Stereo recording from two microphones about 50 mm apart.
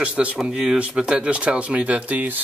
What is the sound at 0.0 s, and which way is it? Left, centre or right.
Speech, right.